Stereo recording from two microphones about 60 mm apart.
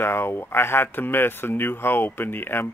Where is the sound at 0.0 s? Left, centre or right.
Left.